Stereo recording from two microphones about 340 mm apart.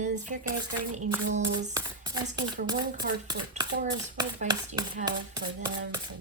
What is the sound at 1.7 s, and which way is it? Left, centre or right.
Speech, centre.